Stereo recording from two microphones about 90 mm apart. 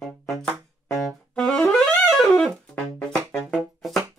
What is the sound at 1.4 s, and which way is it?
Saxophone, 15° left (ahead or behind).